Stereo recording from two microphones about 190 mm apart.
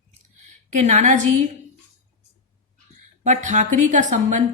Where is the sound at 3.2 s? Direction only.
40° right (ahead or behind).